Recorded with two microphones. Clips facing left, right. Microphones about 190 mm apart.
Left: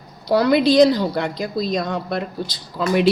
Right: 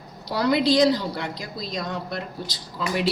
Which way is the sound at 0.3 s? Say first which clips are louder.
Left 5 dB; 60° left (ahead or behind).